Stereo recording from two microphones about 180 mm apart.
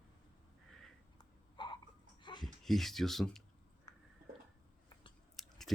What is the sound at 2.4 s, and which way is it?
Speech, centre (ahead or behind).